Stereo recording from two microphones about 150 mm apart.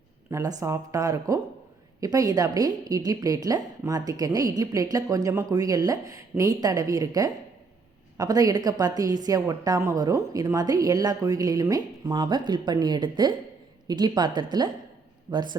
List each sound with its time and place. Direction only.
0.3 s a woman's voice: 20° right (ahead or behind)